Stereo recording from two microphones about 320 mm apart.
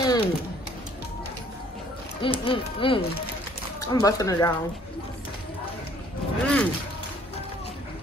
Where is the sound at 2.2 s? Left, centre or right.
Centre.